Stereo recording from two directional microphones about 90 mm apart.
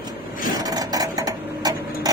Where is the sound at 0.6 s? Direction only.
45° right (ahead or behind).